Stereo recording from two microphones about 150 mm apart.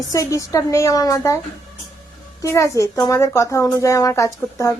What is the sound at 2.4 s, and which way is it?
A woman's voice, 20° left (ahead or behind).